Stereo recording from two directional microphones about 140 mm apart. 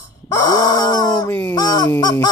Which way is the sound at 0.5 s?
30° left (ahead or behind).